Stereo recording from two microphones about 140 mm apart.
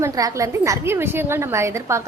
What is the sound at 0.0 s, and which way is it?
A woman's voice, 20° right (ahead or behind).